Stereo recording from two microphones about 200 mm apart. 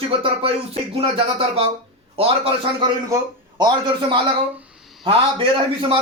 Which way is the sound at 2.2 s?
25° right (ahead or behind).